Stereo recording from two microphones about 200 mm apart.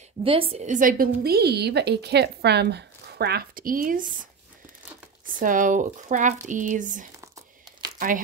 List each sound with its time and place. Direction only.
0.2 s a woman's voice: 30° right (ahead or behind)